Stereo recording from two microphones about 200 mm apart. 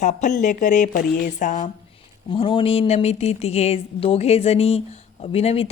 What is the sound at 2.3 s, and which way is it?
Speech, 25° left (ahead or behind).